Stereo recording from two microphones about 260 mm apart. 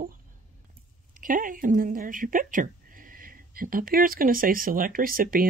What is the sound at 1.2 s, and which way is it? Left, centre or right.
Speech, right.